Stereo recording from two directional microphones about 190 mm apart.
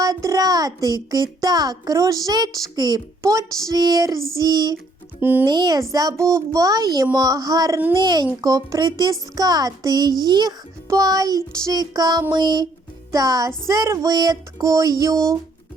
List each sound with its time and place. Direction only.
0.0 s a child's voice: 15° right (ahead or behind)
5.2 s speech: 10° right (ahead or behind)
5.5 s a child's voice: 20° right (ahead or behind)
13.1 s music: 20° right (ahead or behind)
13.7 s speech: 15° right (ahead or behind)